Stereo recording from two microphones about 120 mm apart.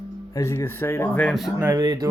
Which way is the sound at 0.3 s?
20° left (ahead or behind).